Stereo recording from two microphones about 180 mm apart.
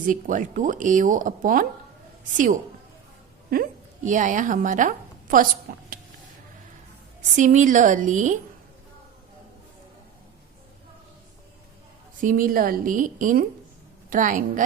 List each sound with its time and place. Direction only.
0.0 s speech: 45° right (ahead or behind)
3.5 s a woman's voice: 50° right (ahead or behind)
7.3 s speech: 45° right (ahead or behind)
12.2 s speech: 50° right (ahead or behind)